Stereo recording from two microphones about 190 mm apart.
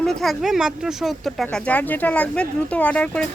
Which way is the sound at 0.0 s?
Centre (ahead or behind).